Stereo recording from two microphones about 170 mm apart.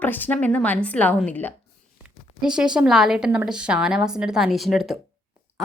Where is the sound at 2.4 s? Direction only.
5° right (ahead or behind).